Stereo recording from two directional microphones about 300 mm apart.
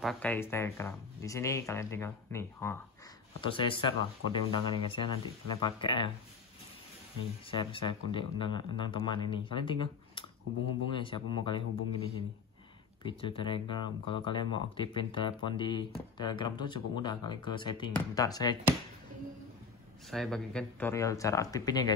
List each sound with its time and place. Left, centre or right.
0.0 s speech: centre
7.5 s speech: centre
13.0 s speech: centre
20.1 s speech: centre